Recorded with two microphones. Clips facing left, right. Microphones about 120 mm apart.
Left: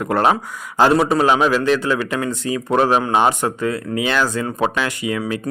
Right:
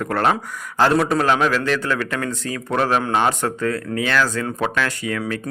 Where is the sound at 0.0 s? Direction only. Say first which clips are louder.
Left 3 dB; 15° left (ahead or behind).